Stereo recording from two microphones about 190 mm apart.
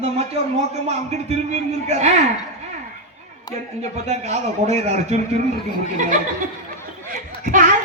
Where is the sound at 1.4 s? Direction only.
35° right (ahead or behind).